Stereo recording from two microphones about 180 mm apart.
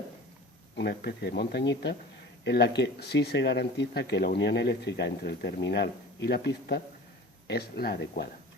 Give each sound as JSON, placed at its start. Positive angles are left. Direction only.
{"t": 0.8, "sound": "speech", "side_deg": 65}